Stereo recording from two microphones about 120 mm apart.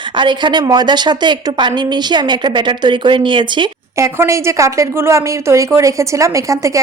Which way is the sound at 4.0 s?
25° right (ahead or behind).